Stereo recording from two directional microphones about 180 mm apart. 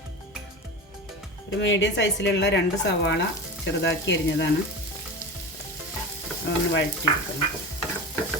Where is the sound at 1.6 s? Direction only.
80° left.